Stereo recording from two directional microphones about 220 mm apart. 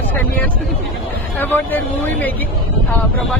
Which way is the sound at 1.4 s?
10° left (ahead or behind).